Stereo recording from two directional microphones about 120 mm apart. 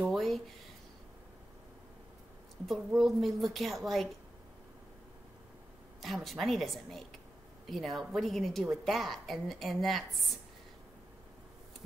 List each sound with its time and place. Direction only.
0.1 s a sound: centre (ahead or behind)
2.6 s a woman's voice: centre (ahead or behind)
6.0 s a woman's voice: centre (ahead or behind)